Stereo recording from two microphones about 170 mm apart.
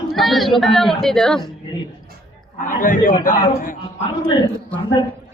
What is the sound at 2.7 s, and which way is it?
A man's voice, 50° left (ahead or behind).